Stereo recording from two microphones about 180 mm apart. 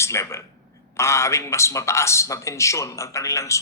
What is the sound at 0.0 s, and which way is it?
A man's voice, 15° left (ahead or behind).